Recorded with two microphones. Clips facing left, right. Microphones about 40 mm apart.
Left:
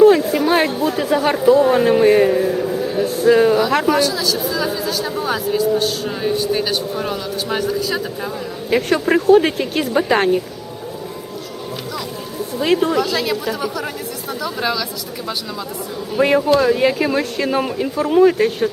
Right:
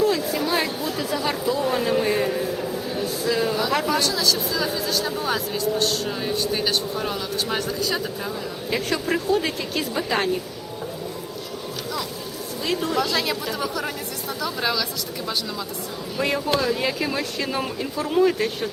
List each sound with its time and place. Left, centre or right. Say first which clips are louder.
0.0 s speech: left 10 dB; left
2.6 s a sound: left 7 dB; left
3.0 s a sound: left 11 dB; left
3.7 s speech: left 6 dB; left
3.9 s speech: left 4 dB; centre
8.7 s speech: left 8 dB; left
12.5 s speech: left 9 dB; left
13.0 s speech: left 4 dB; centre
16.1 s speech: left 9 dB; left